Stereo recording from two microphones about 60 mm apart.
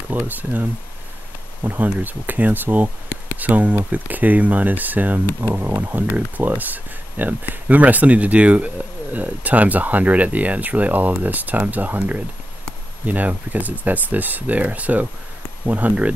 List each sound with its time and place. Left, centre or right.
0.1 s speech: right